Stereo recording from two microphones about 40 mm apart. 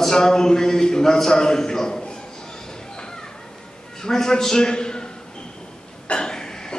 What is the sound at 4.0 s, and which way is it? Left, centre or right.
A man's voice, centre.